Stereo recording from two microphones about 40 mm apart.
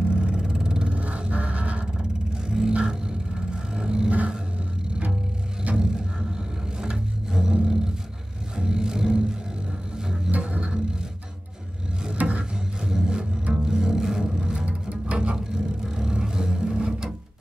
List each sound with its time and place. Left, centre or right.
0.1 s vehicle: right
0.9 s vehicle: right
2.4 s vehicle: centre
5.8 s music: centre
7.6 s roar: centre
8.5 s music: centre
12.2 s a sound: right
12.5 s music: centre
14.4 s music: right
15.3 s music: centre